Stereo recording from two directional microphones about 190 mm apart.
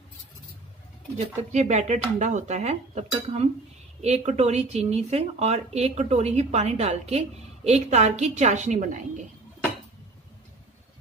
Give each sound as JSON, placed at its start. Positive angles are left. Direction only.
{"t": 1.5, "sound": "speech", "side_deg": -35}